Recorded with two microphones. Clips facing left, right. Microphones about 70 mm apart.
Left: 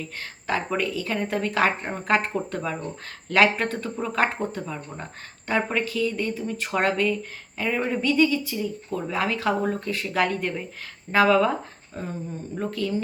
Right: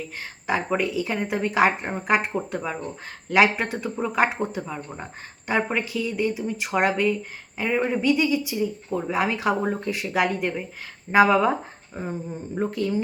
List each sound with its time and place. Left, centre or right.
0.4 s speech: centre